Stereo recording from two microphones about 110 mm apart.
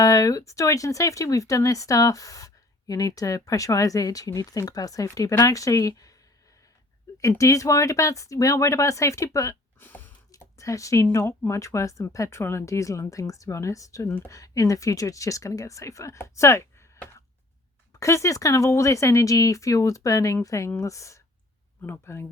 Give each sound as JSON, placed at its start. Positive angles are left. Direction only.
{"t": 0.0, "sound": "speech", "side_deg": 30}
{"t": 7.2, "sound": "speech", "side_deg": 30}
{"t": 9.8, "sound": "a sound", "side_deg": 15}
{"t": 10.3, "sound": "speech", "side_deg": 30}
{"t": 18.0, "sound": "speech", "side_deg": 25}